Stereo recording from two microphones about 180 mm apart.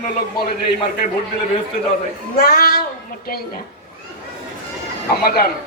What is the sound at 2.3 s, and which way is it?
Speech, 60° left (ahead or behind).